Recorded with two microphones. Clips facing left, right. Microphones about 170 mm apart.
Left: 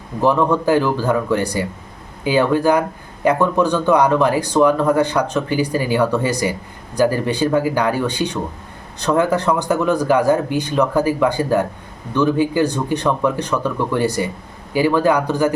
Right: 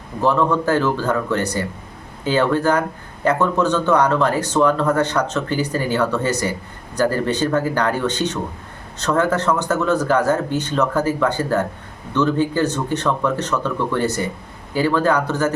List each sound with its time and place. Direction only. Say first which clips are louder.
0.2 s speech: left 2 dB; 15° left (ahead or behind)